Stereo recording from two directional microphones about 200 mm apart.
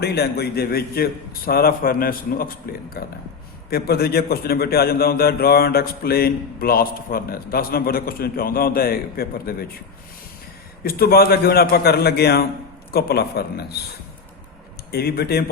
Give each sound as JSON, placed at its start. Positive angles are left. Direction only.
{"t": 0.0, "sound": "a man's voice", "side_deg": 55}
{"t": 10.8, "sound": "a man's voice", "side_deg": 50}
{"t": 14.9, "sound": "a man's voice", "side_deg": 50}